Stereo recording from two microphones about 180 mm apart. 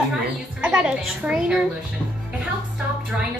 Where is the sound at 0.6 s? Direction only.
5° right (ahead or behind).